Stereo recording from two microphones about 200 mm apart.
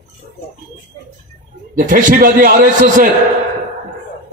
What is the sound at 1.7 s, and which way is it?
A man's voice, 40° right (ahead or behind).